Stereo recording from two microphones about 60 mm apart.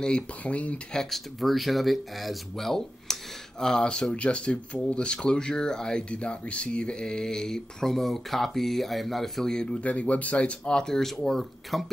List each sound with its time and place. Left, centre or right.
0.0 s speech: centre
0.9 s speech: centre
9.8 s speech: left; by 11.8 s centre